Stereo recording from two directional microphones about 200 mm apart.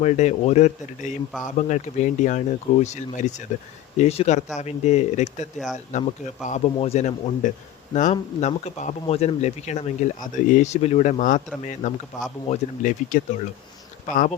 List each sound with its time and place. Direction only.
0.0 s speech: 35° left (ahead or behind)